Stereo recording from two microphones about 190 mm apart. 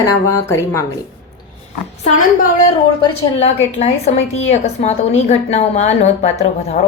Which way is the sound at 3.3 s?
35° left (ahead or behind).